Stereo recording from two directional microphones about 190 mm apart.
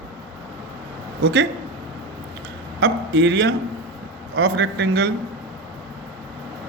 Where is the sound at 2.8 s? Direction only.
65° right (ahead or behind).